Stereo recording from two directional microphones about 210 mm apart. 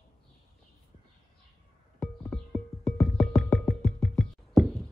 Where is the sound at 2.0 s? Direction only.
Centre (ahead or behind).